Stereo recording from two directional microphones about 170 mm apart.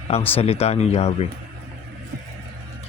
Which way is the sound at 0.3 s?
35° left (ahead or behind).